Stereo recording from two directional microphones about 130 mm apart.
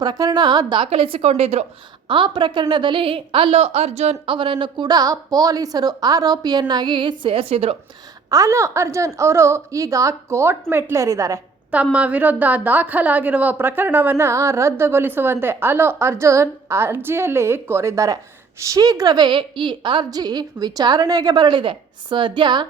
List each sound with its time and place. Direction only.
0.0 s a woman's voice: 30° right (ahead or behind)
0.9 s speech: 45° right (ahead or behind)
2.0 s a woman's voice: 40° right (ahead or behind)
8.3 s a woman's voice: 25° right (ahead or behind)
11.7 s a woman's voice: 10° right (ahead or behind); by 22.6 s 35° right (ahead or behind)